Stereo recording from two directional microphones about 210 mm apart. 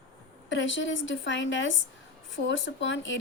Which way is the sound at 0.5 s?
60° left (ahead or behind).